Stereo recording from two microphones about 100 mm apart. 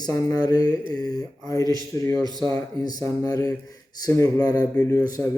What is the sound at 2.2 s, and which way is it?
Speech, 40° right (ahead or behind).